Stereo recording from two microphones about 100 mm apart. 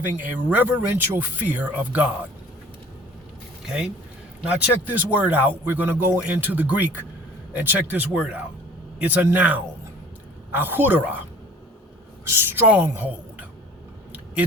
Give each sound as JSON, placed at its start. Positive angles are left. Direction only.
{"t": 0.0, "sound": "speech", "side_deg": -15}
{"t": 3.7, "sound": "a man's voice", "side_deg": -10}
{"t": 12.3, "sound": "a woman's voice", "side_deg": -20}